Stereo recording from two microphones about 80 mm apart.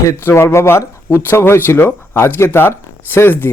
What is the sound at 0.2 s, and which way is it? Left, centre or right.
A man's voice, left.